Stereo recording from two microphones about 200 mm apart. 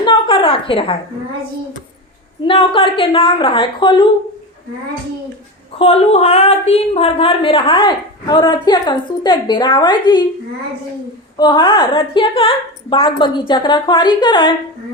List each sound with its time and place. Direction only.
0.0 s a sound: 25° left (ahead or behind)
2.4 s speech: 25° left (ahead or behind)
5.8 s speech: 30° left (ahead or behind)
11.3 s speech: 20° left (ahead or behind)